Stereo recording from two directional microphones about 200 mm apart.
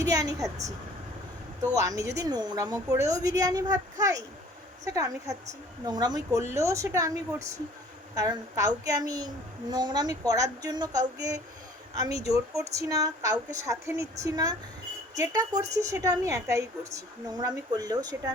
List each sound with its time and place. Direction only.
0.0 s a woman's voice: 15° right (ahead or behind)
1.7 s a child's voice: 15° right (ahead or behind)